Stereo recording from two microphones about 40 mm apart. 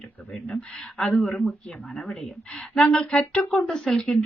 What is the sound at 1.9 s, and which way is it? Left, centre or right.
Speech, centre.